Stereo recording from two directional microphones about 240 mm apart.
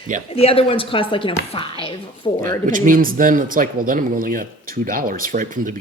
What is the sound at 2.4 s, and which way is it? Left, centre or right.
Speech, right.